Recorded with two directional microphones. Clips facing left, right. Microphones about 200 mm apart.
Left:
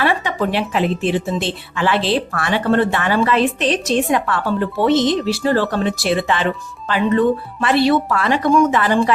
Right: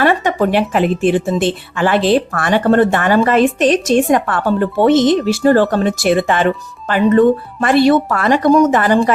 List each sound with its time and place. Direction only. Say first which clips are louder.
0.0 s a woman's voice: right 5 dB; 50° right (ahead or behind)